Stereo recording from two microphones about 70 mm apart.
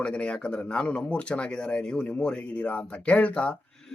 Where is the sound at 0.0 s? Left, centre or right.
Centre.